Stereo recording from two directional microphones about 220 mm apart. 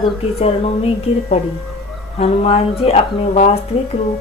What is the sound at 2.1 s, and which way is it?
Speech, 25° left (ahead or behind).